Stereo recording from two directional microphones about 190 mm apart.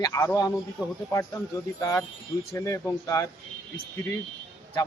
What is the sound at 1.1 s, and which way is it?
Speech, 15° left (ahead or behind).